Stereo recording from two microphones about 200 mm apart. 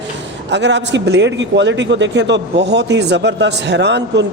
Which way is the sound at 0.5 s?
60° right (ahead or behind).